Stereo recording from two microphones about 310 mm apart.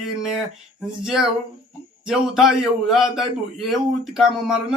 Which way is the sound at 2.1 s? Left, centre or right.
Centre.